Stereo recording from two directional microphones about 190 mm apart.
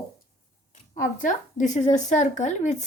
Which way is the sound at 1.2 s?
40° left (ahead or behind).